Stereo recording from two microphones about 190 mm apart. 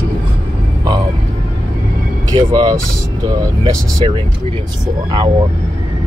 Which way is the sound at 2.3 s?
20° right (ahead or behind).